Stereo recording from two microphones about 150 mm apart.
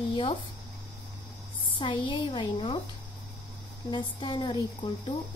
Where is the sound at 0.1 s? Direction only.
35° left (ahead or behind).